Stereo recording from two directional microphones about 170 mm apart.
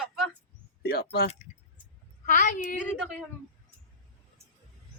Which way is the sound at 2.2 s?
50° left (ahead or behind).